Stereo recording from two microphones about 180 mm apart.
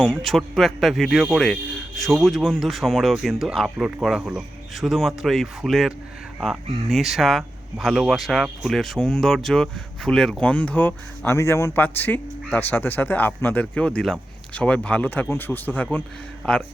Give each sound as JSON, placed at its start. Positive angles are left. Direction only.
{"t": 0.1, "sound": "speech", "side_deg": 0}
{"t": 6.9, "sound": "speech", "side_deg": 0}